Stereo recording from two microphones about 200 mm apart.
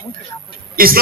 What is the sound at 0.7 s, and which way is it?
Speech, 45° right (ahead or behind).